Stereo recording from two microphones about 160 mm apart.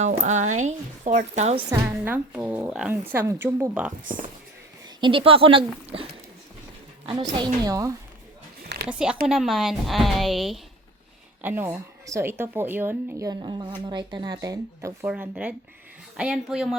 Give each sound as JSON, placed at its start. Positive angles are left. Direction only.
{"t": 0.1, "sound": "a woman's voice", "side_deg": -50}
{"t": 1.7, "sound": "speech", "side_deg": -15}
{"t": 4.0, "sound": "speech", "side_deg": -55}
{"t": 4.9, "sound": "speech", "side_deg": -30}
{"t": 8.9, "sound": "a woman's voice", "side_deg": -5}
{"t": 11.4, "sound": "speech", "side_deg": -10}
{"t": 13.4, "sound": "speech", "side_deg": -30}
{"t": 15.0, "sound": "a woman's voice", "side_deg": -10}